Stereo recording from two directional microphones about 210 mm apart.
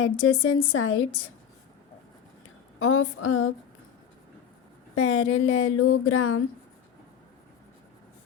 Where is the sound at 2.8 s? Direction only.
75° left (ahead or behind).